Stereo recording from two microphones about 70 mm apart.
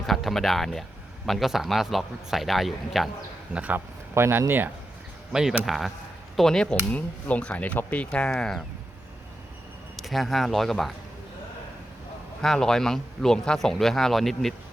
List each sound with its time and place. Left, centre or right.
0.1 s speech: centre
3.5 s a man's voice: right
4.1 s speech: right
5.3 s speech: centre
6.9 s speech: centre
10.0 s speech: centre
12.4 s speech: centre